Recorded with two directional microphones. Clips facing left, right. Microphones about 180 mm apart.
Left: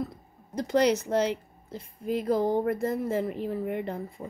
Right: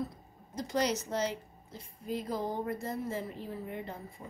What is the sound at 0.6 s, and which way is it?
A woman's voice, 60° left (ahead or behind).